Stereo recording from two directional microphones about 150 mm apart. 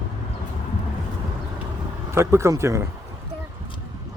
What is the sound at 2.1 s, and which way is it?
Speech, 20° right (ahead or behind).